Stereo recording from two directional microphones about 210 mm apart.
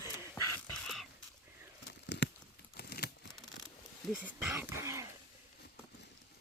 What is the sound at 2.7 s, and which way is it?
Crumpling, 50° left (ahead or behind).